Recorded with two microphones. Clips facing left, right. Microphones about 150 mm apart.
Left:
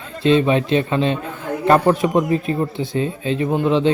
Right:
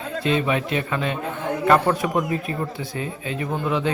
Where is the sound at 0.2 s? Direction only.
30° left (ahead or behind).